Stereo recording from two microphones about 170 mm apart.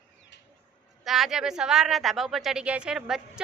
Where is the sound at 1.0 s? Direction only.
Centre (ahead or behind).